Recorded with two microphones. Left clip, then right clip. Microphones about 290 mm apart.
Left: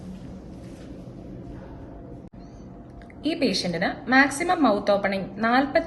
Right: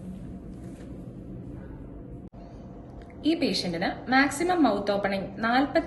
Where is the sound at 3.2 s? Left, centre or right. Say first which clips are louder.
Left 2 dB; left.